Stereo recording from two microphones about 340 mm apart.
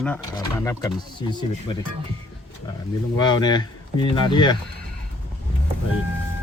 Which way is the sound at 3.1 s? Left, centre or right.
Centre.